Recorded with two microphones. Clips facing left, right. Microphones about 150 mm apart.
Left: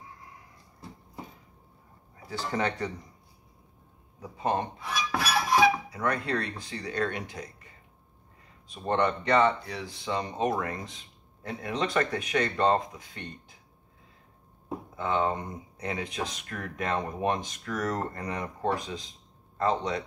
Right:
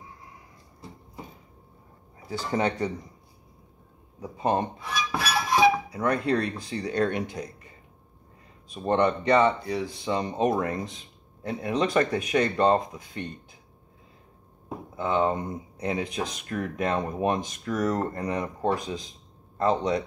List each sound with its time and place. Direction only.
2.2 s speech: 20° right (ahead or behind)
4.2 s speech: 20° right (ahead or behind)
5.1 s a sound: 20° right (ahead or behind)
6.8 s speech: 25° right (ahead or behind)
8.6 s speech: 10° right (ahead or behind)
15.0 s speech: 15° right (ahead or behind)